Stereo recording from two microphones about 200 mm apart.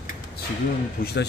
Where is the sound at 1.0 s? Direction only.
45° left (ahead or behind).